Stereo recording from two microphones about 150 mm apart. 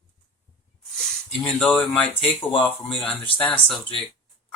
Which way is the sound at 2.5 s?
35° left (ahead or behind).